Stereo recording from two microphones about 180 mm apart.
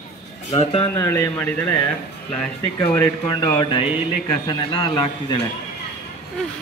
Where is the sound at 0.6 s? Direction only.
30° left (ahead or behind).